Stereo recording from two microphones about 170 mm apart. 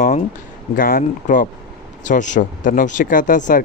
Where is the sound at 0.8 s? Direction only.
55° left (ahead or behind).